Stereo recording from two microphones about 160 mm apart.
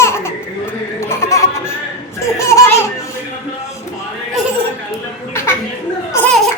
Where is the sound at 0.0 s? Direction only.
15° left (ahead or behind).